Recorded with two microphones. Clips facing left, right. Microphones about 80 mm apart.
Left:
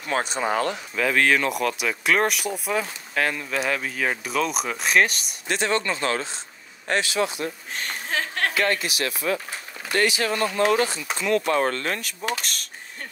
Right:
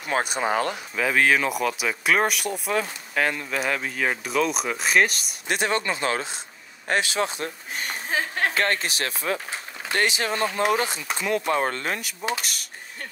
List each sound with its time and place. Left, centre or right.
0.0 s speech: centre
5.5 s speech: centre
7.0 s speech: right
7.7 s a sound: centre
8.5 s speech: right; by 12.6 s centre